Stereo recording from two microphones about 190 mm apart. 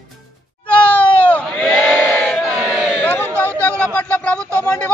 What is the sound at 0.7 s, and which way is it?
Crowd, 5° left (ahead or behind).